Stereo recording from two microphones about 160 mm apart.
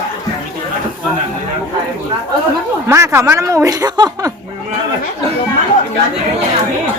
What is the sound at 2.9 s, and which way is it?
A woman's voice, 15° right (ahead or behind).